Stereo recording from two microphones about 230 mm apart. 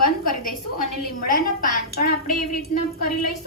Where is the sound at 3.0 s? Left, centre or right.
Left.